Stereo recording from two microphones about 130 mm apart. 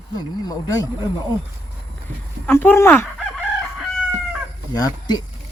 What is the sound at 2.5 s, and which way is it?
Speech, 20° left (ahead or behind).